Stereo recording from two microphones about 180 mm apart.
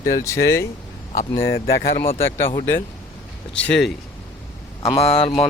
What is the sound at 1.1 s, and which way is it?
Speech, 50° left (ahead or behind).